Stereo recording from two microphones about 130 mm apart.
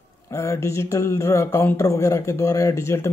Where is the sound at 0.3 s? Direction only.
20° left (ahead or behind).